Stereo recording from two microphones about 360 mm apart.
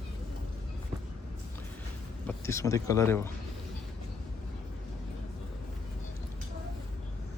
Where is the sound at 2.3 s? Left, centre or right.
Centre.